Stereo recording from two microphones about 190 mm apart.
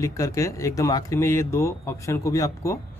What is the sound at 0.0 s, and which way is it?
Speech, 15° left (ahead or behind).